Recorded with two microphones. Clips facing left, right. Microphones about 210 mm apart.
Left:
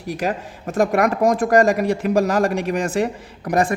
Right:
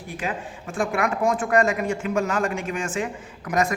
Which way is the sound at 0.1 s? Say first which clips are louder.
Left 7 dB; 40° left (ahead or behind).